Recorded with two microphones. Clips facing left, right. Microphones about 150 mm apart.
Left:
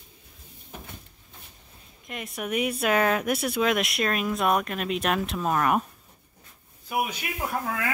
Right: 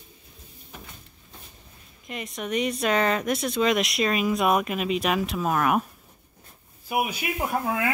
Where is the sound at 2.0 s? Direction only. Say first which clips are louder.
Right 1 dB; 5° left (ahead or behind).